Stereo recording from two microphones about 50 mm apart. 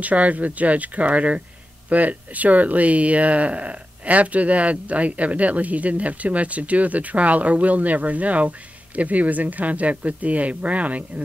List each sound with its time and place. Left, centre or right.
0.0 s speech: right